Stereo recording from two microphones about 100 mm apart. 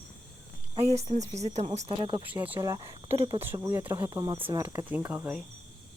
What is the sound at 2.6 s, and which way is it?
Speech, 35° right (ahead or behind).